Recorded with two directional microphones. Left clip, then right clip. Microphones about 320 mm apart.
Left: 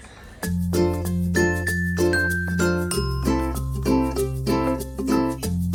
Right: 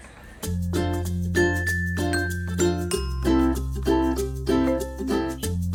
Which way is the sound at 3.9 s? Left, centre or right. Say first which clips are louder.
Even; centre.